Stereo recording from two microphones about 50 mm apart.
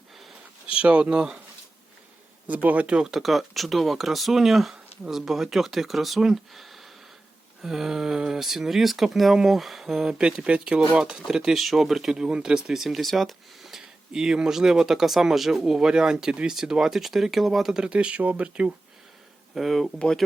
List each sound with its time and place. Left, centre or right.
0.8 s speech: right
2.5 s speech: right
2.8 s speech: centre
3.1 s speech: centre
17.7 s speech: right
19.5 s speech: centre